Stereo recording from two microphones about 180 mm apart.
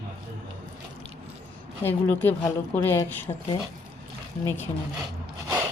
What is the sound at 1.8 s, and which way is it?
A woman's voice, 10° left (ahead or behind).